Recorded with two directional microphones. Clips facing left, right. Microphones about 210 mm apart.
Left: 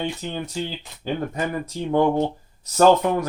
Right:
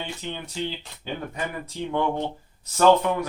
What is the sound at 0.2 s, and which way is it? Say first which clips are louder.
Speech: left 5 dB; 40° left (ahead or behind).